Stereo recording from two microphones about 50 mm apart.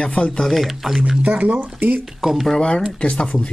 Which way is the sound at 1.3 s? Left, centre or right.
Right.